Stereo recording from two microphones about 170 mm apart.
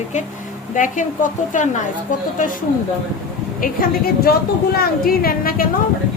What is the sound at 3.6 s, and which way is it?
A woman's voice, 60° left (ahead or behind).